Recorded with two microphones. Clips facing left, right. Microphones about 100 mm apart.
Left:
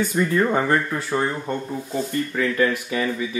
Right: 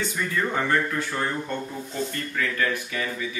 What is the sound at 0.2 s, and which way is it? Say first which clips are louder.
Speech: left 8 dB; 40° left (ahead or behind).